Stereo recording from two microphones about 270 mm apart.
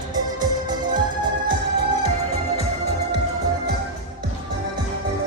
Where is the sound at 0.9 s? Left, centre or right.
Centre.